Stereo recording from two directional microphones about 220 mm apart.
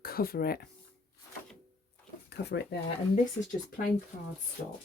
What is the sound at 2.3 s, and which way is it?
Speech, 50° left (ahead or behind).